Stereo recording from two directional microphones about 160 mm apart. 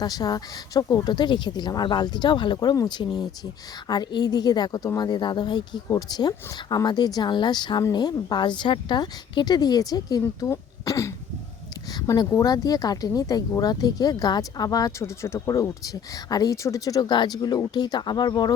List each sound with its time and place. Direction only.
0.0 s a woman's voice: 25° left (ahead or behind)